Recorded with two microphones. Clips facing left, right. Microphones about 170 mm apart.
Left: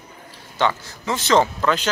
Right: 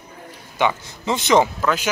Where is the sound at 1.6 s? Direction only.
5° right (ahead or behind).